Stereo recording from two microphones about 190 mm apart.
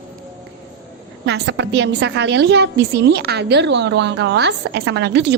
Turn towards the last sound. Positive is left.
turn(degrees=-65)  # may be behind; listen again after turning